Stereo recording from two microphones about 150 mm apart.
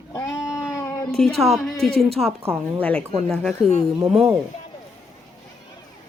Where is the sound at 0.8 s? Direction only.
20° left (ahead or behind).